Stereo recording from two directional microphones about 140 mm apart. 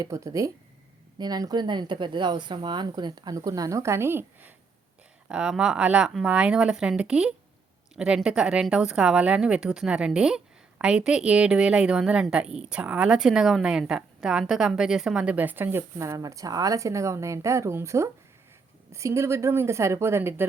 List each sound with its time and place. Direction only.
0.0 s a woman's voice: 25° right (ahead or behind)